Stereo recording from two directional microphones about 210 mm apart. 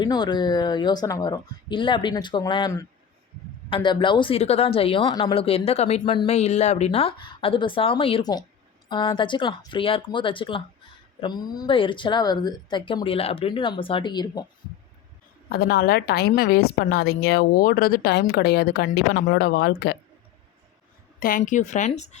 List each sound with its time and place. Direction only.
0.0 s speech: 20° left (ahead or behind)
3.8 s speech: 25° left (ahead or behind)
15.4 s a woman's voice: 45° left (ahead or behind)
21.2 s a woman's voice: 40° left (ahead or behind)